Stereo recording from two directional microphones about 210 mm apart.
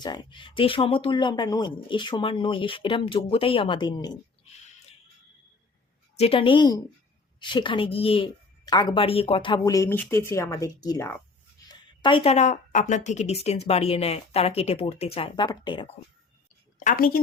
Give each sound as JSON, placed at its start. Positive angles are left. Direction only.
{"t": 0.0, "sound": "speech", "side_deg": 20}
{"t": 6.1, "sound": "speech", "side_deg": 25}
{"t": 16.8, "sound": "a woman's voice", "side_deg": 40}